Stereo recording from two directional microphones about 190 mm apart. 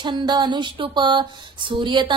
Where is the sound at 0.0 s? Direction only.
20° right (ahead or behind).